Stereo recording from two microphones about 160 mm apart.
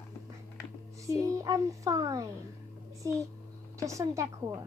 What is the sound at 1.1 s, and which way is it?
Speech, 20° right (ahead or behind).